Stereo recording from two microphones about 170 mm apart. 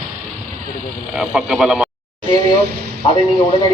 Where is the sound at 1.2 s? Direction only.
5° right (ahead or behind).